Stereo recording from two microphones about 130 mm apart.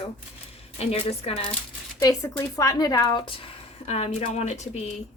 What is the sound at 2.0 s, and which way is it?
Speech, 25° left (ahead or behind).